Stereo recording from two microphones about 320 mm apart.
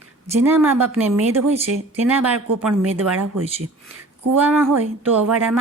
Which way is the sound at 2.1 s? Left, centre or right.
Centre.